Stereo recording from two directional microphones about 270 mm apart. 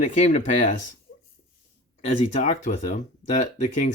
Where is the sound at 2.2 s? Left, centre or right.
Left.